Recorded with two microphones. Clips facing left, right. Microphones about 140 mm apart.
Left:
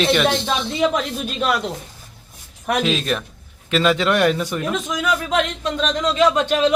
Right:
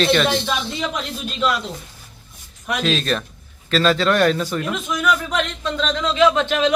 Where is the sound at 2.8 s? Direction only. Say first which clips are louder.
Even; 10° left (ahead or behind).